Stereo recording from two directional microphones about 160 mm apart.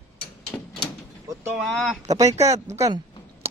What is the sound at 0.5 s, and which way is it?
Door, 5° left (ahead or behind).